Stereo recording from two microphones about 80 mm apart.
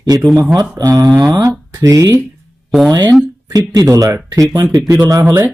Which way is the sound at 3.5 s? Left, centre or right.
Right.